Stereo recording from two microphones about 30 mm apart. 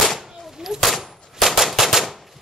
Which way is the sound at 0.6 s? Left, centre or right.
Centre.